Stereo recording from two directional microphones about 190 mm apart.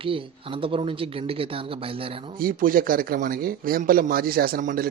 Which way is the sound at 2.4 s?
45° right (ahead or behind).